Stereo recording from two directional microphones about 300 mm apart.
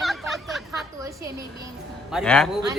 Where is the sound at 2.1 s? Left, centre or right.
Centre.